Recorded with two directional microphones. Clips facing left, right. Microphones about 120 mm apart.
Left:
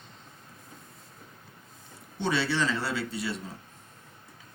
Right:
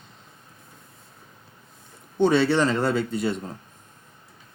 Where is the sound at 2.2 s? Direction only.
50° right (ahead or behind).